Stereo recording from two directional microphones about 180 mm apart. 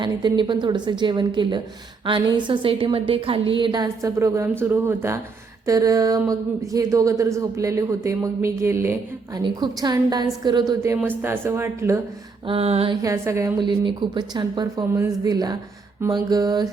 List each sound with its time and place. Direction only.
0.0 s a woman's voice: 25° right (ahead or behind)
9.4 s a woman's voice: 25° right (ahead or behind)
12.5 s music: 35° right (ahead or behind)
13.0 s a woman's voice: 15° right (ahead or behind)